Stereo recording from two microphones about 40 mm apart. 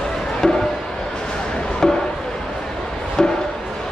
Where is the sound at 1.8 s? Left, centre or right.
Centre.